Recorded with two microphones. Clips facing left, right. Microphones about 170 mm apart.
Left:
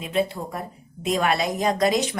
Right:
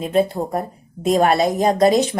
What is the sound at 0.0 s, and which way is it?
A woman's voice, 40° right (ahead or behind).